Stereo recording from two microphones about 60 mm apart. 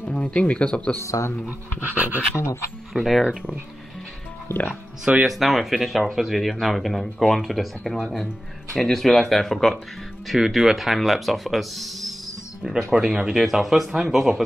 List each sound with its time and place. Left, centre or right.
0.0 s speech: left
1.0 s speech: left
1.8 s speech: right
2.3 s speech: left
2.9 s speech: centre
4.5 s speech: left
5.1 s speech: right
5.4 s speech: centre